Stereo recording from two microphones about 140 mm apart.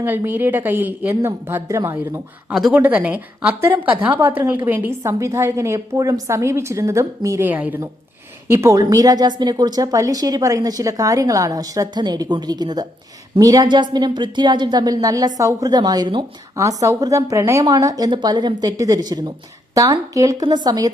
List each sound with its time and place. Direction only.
0.2 s a woman's voice: 15° right (ahead or behind)
2.5 s a woman's voice: 5° right (ahead or behind); by 16.2 s 30° right (ahead or behind)
16.6 s a woman's voice: 20° right (ahead or behind)